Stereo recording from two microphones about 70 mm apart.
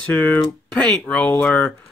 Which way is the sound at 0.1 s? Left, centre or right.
Left.